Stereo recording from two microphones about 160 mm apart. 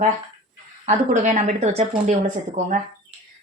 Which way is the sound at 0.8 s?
50° right (ahead or behind).